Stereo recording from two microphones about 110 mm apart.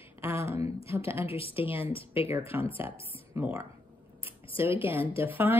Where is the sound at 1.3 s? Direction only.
60° left (ahead or behind).